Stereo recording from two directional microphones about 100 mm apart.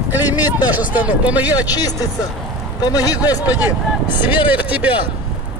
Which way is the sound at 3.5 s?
15° right (ahead or behind).